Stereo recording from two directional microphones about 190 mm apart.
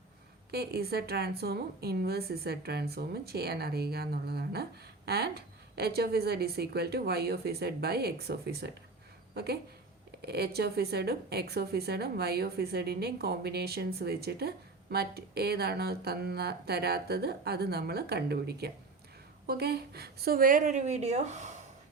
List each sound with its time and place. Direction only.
0.5 s a woman's voice: 55° right (ahead or behind); by 21.5 s 40° right (ahead or behind)